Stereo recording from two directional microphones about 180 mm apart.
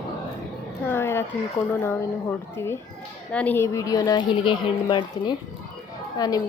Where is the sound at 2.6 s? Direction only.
15° left (ahead or behind).